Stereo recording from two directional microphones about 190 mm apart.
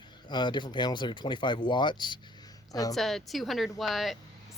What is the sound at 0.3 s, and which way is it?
Speech, 25° left (ahead or behind).